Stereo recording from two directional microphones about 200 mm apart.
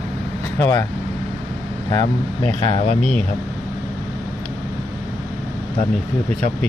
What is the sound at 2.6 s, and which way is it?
Speech, 30° left (ahead or behind).